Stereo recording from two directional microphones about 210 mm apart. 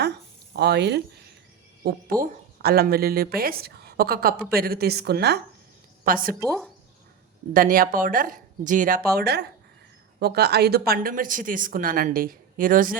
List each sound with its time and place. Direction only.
0.5 s speech: 50° right (ahead or behind)
1.8 s speech: 40° right (ahead or behind)
6.4 s speech: 5° left (ahead or behind)
7.5 s speech: 40° right (ahead or behind)
9.1 s speech: 50° right (ahead or behind)